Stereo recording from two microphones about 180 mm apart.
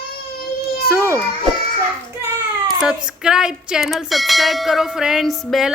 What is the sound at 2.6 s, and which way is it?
Speech, 5° right (ahead or behind).